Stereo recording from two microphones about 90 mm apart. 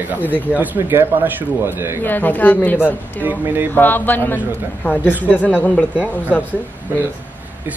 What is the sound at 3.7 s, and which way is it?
A man's voice, 20° left (ahead or behind).